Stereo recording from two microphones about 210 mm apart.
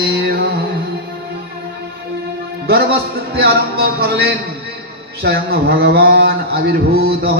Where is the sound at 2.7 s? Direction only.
50° right (ahead or behind).